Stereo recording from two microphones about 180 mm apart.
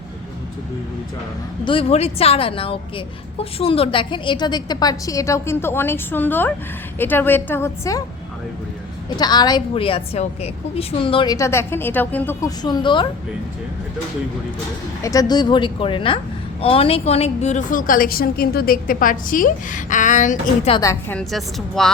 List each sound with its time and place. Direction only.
1.6 s a woman's voice: 30° left (ahead or behind)
9.0 s a woman's voice: 25° left (ahead or behind)
15.0 s a woman's voice: 20° left (ahead or behind); by 20.7 s 45° left (ahead or behind)
20.7 s a woman's voice: 15° left (ahead or behind)
21.2 s speech: centre (ahead or behind)